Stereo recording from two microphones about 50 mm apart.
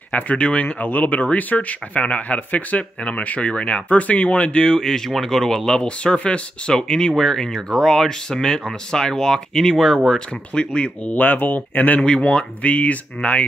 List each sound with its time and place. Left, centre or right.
0.1 s speech: left
4.7 s speech: centre
11.1 s speech: left
12.0 s speech: centre